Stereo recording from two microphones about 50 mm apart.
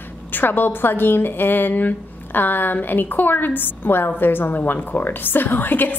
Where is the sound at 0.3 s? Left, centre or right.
Left.